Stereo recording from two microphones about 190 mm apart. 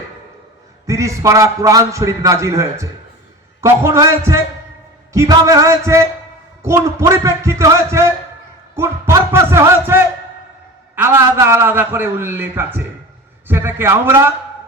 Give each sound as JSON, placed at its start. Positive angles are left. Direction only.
{"t": 0.9, "sound": "a man's voice", "side_deg": -15}